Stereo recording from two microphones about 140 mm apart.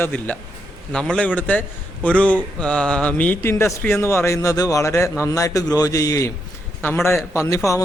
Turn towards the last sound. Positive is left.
turn(degrees=20)  # may be behind; listen again after turning